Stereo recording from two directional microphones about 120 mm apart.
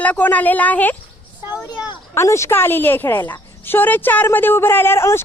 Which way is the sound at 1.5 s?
35° left (ahead or behind).